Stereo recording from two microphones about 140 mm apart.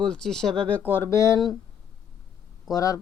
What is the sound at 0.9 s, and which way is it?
Speech, 20° left (ahead or behind).